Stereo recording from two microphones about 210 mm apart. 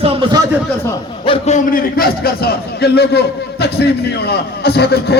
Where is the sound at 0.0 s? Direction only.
20° right (ahead or behind).